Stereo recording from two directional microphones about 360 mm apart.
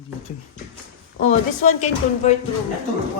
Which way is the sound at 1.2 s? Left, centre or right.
Centre.